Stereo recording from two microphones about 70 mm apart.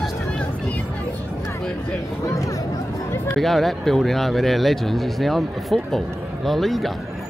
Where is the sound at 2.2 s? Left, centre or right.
Left.